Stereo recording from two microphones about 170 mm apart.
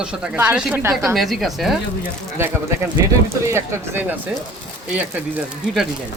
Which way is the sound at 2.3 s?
15° right (ahead or behind).